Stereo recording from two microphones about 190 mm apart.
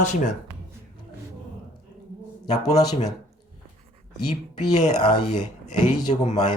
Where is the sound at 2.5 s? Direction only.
20° left (ahead or behind).